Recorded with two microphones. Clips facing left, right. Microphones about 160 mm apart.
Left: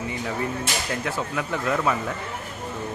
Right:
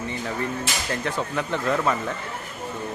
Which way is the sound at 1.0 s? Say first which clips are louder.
Right 1 dB; 10° left (ahead or behind).